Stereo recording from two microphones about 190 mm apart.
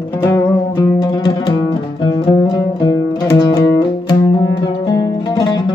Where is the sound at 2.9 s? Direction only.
20° left (ahead or behind).